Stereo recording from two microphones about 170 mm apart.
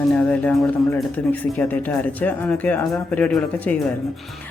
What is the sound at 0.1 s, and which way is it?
Speech, 5° left (ahead or behind).